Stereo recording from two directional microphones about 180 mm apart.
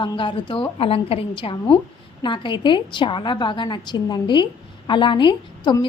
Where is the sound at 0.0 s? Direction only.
25° left (ahead or behind).